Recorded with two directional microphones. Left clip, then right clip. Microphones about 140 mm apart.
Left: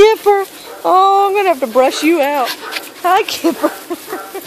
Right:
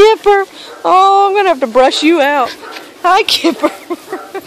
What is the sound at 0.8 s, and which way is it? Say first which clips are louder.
Speech: right 2 dB; 10° right (ahead or behind).